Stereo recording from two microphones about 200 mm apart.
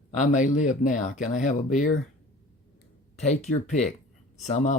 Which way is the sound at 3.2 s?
35° left (ahead or behind).